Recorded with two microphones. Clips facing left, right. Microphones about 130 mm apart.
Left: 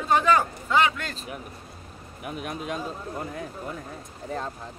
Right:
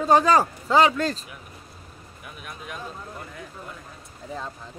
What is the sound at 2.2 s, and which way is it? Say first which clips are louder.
Speech: left 8 dB; 45° left (ahead or behind).